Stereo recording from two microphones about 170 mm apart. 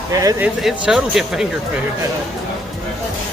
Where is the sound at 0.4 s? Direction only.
5° right (ahead or behind).